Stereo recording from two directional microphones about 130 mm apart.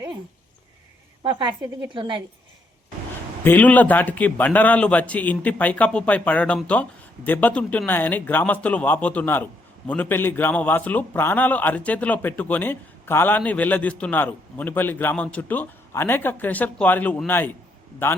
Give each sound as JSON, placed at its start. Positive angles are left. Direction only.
{"t": 1.2, "sound": "speech", "side_deg": -40}
{"t": 3.4, "sound": "a man's voice", "side_deg": 15}